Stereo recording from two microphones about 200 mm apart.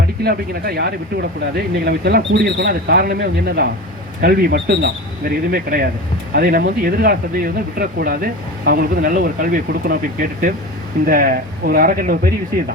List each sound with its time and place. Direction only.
0.3 s speech: 50° right (ahead or behind)